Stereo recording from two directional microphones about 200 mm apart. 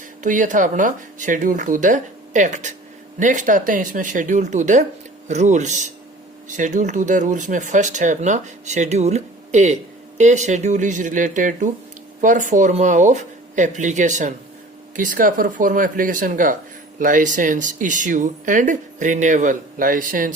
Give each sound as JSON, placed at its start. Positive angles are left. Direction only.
{"t": 0.2, "sound": "speech", "side_deg": -40}